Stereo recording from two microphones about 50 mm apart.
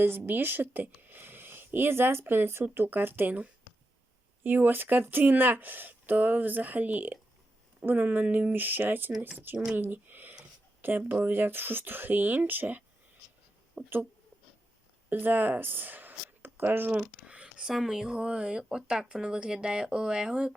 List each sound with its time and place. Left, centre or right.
0.3 s speech: right
15.1 s speech: right
17.2 s a sound: right
17.7 s speech: centre